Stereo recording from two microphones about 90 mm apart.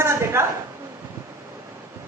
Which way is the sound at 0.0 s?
30° right (ahead or behind).